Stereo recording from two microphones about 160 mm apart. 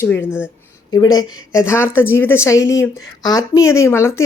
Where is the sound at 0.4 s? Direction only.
20° left (ahead or behind).